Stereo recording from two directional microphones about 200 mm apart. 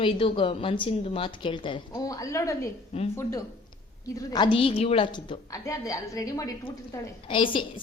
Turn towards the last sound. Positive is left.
turn(degrees=25)  # may be behind; listen again after turning